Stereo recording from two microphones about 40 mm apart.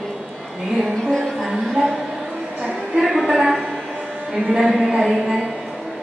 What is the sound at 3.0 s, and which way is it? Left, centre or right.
Speech, centre.